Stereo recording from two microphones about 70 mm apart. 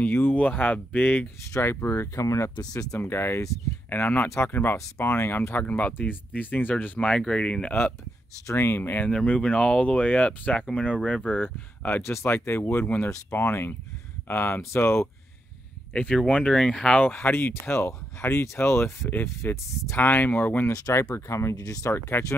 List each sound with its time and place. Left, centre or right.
0.0 s speech: left
1.6 s speech: left
3.0 s speech: left; by 7.7 s centre
8.5 s speech: left; by 11.2 s centre
11.2 s speech: left
12.0 s speech: left
13.1 s speech: left
15.9 s speech: centre
17.1 s speech: left
19.2 s speech: left
20.0 s speech: left
21.3 s speech: left
22.2 s speech: left